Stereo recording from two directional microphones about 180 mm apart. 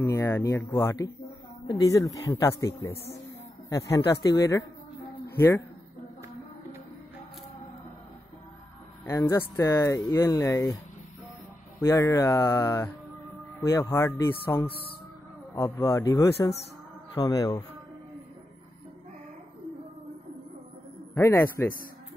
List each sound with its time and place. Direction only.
0.0 s speech: 15° left (ahead or behind)
9.0 s speech: 15° left (ahead or behind)
11.8 s speech: 15° left (ahead or behind)
21.1 s speech: 15° left (ahead or behind)